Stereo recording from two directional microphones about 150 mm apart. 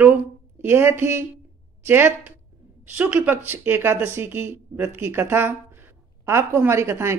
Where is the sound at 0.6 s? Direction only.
15° right (ahead or behind).